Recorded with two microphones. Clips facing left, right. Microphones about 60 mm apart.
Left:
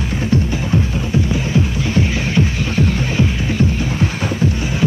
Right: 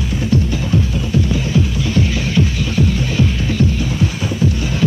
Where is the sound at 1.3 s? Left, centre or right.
Left.